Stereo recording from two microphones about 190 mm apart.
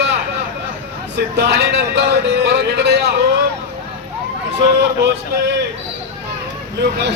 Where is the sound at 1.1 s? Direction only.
65° right (ahead or behind).